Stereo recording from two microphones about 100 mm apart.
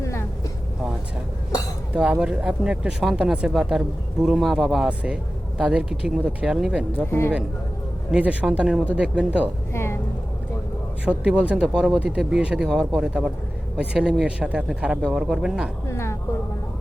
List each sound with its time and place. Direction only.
0.0 s boat: 30° left (ahead or behind)
1.9 s speech: 15° right (ahead or behind)
7.1 s speech: 20° left (ahead or behind)
8.1 s speech: 15° right (ahead or behind)
9.7 s vehicle: 25° left (ahead or behind)
11.2 s speech: 15° right (ahead or behind)
15.9 s a sound: 25° left (ahead or behind)